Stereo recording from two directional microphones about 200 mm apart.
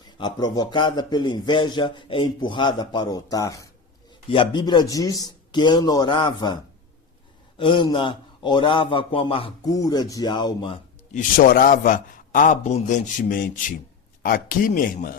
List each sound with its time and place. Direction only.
0.2 s speech: 20° left (ahead or behind)
7.6 s speech: 25° left (ahead or behind)
11.1 s a man's voice: 40° left (ahead or behind)